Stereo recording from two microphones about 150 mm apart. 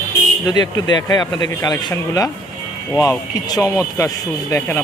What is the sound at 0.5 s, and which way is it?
Speech, 30° left (ahead or behind).